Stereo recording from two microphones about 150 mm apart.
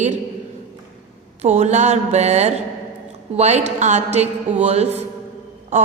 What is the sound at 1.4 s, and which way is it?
A woman's voice, 50° right (ahead or behind).